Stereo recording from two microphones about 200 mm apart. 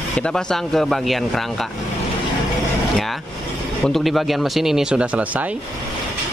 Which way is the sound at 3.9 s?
Centre (ahead or behind).